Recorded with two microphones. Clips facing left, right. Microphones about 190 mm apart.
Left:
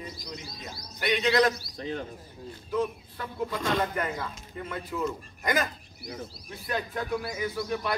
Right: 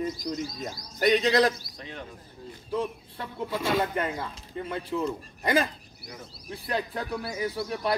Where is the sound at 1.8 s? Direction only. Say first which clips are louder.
Left 7 dB; 35° left (ahead or behind).